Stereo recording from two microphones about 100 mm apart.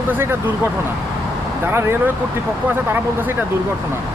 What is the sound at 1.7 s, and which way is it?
Speech, 25° right (ahead or behind).